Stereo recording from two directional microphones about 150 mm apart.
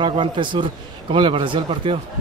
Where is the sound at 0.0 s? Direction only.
35° right (ahead or behind).